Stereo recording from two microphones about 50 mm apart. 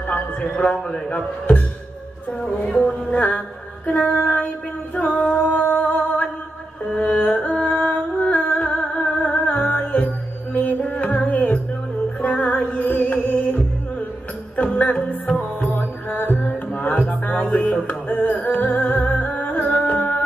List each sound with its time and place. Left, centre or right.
0.1 s a man's voice: left
3.1 s female singing: left
3.3 s mantra: left
4.1 s female singing: left
4.9 s singing: left
5.6 s a sound: left
7.1 s music: left
14.6 s music: left